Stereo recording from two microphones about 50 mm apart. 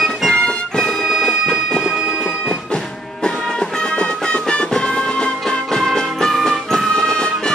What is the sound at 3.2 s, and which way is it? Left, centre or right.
Music, centre.